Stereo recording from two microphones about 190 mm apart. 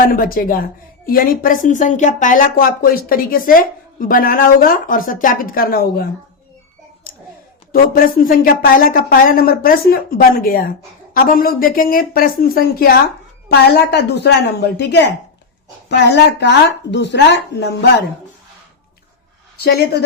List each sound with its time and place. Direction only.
0.0 s a woman's voice: 50° left (ahead or behind)
7.7 s a woman's voice: 50° left (ahead or behind)
16.4 s speech: 65° left (ahead or behind)
19.5 s speech: 55° left (ahead or behind)